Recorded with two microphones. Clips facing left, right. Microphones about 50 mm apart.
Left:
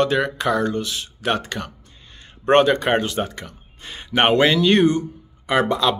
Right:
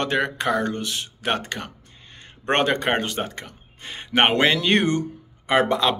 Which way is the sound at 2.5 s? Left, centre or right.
Right.